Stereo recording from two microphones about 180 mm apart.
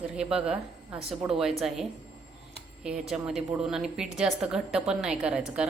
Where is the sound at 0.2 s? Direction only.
5° right (ahead or behind).